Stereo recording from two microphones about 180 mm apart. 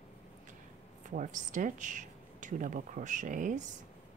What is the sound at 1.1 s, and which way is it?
Speech, 45° right (ahead or behind).